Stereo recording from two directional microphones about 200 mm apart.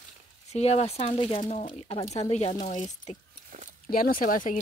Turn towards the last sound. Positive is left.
turn(degrees=40)  # may be behind; listen again after turning